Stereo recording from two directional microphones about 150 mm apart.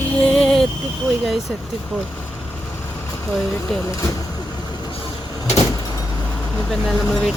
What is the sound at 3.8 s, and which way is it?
Speech, 20° left (ahead or behind).